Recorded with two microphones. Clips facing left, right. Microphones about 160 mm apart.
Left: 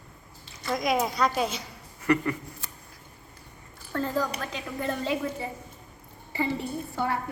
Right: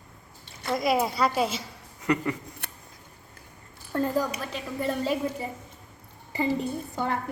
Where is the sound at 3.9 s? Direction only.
15° right (ahead or behind).